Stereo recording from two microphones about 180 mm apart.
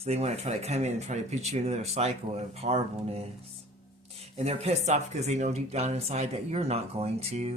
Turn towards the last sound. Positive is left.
turn(degrees=-35)  # may be behind; listen again after turning